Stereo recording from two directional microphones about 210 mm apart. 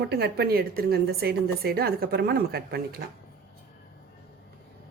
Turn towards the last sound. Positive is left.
turn(degrees=-45)  # may be behind; listen again after turning